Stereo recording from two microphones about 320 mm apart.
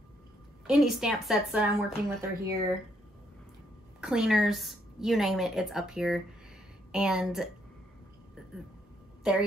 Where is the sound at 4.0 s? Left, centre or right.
Centre.